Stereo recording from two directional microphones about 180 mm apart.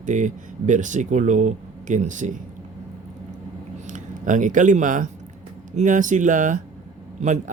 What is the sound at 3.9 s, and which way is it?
Speech, 45° right (ahead or behind).